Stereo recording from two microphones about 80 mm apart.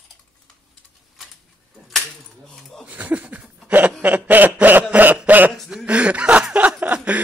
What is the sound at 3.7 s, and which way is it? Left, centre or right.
Chuckle, right.